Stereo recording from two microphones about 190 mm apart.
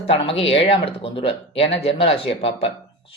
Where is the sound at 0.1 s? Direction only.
30° left (ahead or behind).